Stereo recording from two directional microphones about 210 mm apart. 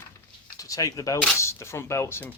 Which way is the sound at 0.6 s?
15° left (ahead or behind).